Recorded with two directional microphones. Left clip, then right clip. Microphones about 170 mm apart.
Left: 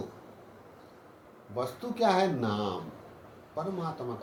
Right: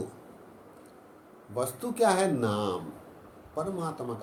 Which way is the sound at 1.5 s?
50° right (ahead or behind).